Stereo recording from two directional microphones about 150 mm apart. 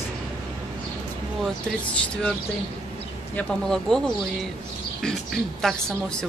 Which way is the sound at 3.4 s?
5° left (ahead or behind).